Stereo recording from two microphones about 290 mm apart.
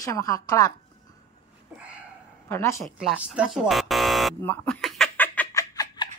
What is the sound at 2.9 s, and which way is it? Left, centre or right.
Buzzer, centre.